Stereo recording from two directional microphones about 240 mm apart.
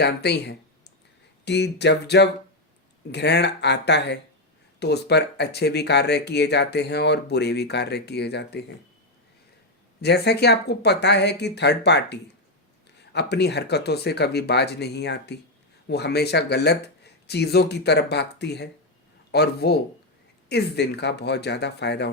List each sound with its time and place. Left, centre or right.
0.0 s speech: left
10.0 s speech: left